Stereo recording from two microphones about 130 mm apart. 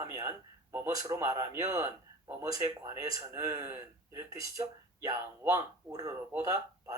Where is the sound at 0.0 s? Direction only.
20° right (ahead or behind).